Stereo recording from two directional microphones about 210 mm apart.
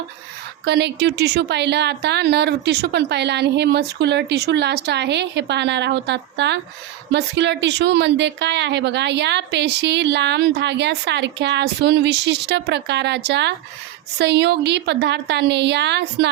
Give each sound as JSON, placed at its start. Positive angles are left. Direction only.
{"t": 0.6, "sound": "a woman's voice", "side_deg": -50}